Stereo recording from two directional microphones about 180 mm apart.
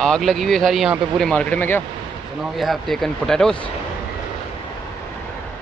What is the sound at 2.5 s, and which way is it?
Speech, centre (ahead or behind).